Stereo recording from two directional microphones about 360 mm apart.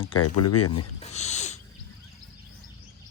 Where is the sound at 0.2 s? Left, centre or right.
Left.